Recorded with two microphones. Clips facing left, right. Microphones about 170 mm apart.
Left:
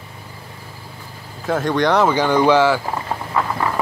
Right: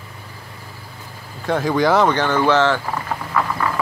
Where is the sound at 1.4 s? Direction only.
Centre (ahead or behind).